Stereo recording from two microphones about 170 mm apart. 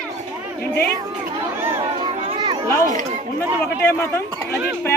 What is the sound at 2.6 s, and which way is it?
A child's voice, 15° left (ahead or behind).